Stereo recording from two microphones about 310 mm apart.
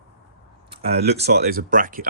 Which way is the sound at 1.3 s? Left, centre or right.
Right.